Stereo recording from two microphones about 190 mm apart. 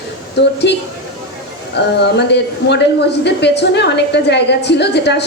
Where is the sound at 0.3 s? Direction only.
65° left (ahead or behind).